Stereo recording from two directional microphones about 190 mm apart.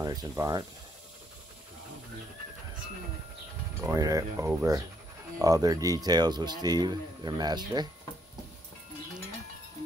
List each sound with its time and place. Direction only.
0.0 s speech: 20° right (ahead or behind)
3.8 s speech: 15° right (ahead or behind)